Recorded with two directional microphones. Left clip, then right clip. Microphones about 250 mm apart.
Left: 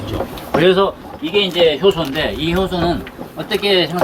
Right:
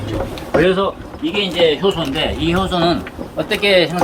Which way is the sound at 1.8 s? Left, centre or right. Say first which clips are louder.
Left 2 dB; centre.